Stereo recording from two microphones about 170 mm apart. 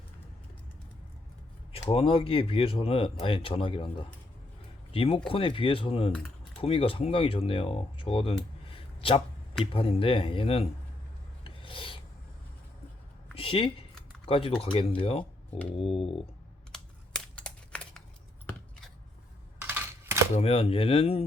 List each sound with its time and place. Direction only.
1.7 s speech: 35° left (ahead or behind)
6.1 s typing: 5° left (ahead or behind)
6.6 s speech: 35° left (ahead or behind)
8.7 s a sound: 35° left (ahead or behind)
9.7 s speech: 35° left (ahead or behind)
11.4 s filing: 30° left (ahead or behind)
13.3 s a sound: 30° left (ahead or behind)
14.3 s speech: 35° left (ahead or behind)
16.7 s computer keyboard: 5° left (ahead or behind)
19.5 s a sound: 15° right (ahead or behind)
20.3 s speech: 35° left (ahead or behind)